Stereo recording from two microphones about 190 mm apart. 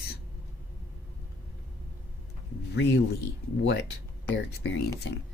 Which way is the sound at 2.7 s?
65° left (ahead or behind).